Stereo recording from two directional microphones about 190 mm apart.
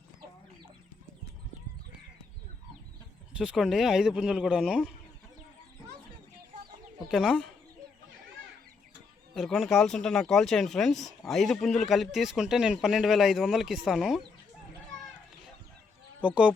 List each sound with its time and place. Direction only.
3.3 s speech: 5° right (ahead or behind)
7.1 s speech: centre (ahead or behind)
9.3 s speech: centre (ahead or behind)
16.2 s speech: 5° right (ahead or behind)